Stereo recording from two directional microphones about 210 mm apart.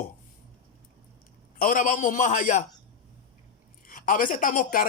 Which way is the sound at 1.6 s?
40° left (ahead or behind).